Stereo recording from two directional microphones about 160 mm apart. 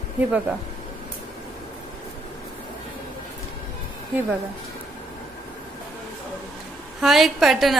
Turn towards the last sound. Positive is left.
turn(degrees=0)  # may be behind; listen again after turning